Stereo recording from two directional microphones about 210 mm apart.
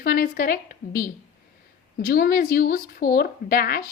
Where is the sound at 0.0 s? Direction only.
45° left (ahead or behind).